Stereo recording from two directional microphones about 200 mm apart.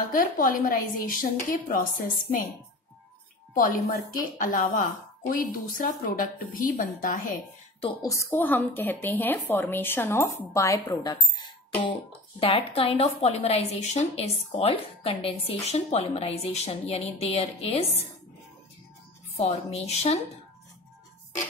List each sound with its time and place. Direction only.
0.1 s a woman's voice: 45° left (ahead or behind)
3.5 s a woman's voice: 45° left (ahead or behind)
7.8 s a woman's voice: 15° left (ahead or behind)
19.3 s a woman's voice: 30° left (ahead or behind)